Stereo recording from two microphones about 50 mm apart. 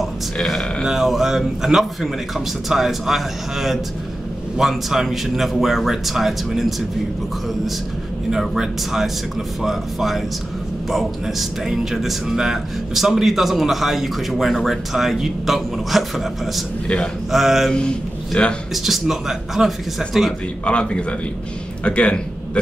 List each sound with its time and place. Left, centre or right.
0.8 s speech: centre
8.3 s speech: centre
16.8 s a man's voice: left
17.3 s speech: centre
18.3 s a man's voice: left
18.7 s speech: centre
20.6 s a man's voice: left